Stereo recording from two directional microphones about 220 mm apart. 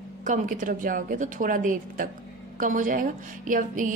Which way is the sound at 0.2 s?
35° right (ahead or behind).